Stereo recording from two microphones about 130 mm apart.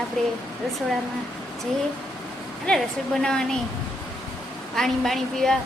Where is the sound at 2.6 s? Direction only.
5° left (ahead or behind).